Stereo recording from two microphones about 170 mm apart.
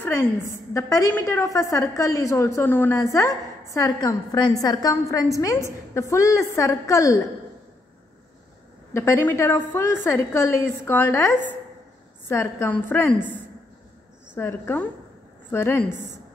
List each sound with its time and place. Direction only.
0.0 s a woman's voice: 15° left (ahead or behind)
8.9 s a woman's voice: 15° left (ahead or behind)
14.3 s a woman's voice: 10° left (ahead or behind)